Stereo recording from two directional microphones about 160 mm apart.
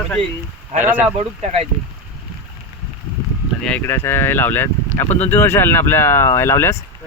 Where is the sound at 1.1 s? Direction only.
40° right (ahead or behind).